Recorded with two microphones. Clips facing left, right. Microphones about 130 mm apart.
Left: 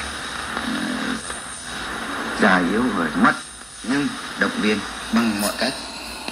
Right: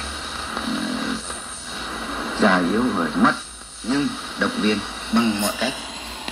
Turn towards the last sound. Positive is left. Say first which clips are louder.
# even
turn(degrees=-10)  # may be behind; listen again after turning